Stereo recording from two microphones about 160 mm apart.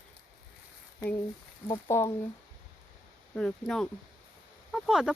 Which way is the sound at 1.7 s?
15° left (ahead or behind).